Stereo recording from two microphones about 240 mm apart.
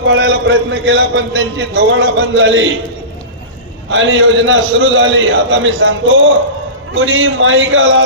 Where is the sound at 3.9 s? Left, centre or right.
Right.